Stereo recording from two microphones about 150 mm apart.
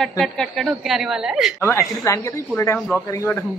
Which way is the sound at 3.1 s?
15° left (ahead or behind).